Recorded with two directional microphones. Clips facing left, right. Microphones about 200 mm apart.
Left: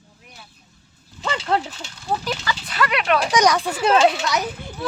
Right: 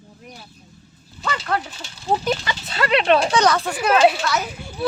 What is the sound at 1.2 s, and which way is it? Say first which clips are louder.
Speech: left 2 dB; 25° left (ahead or behind).